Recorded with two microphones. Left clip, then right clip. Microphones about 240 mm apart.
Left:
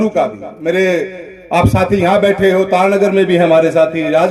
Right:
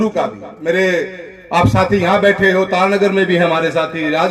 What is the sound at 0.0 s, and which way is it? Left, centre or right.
A man's voice, left.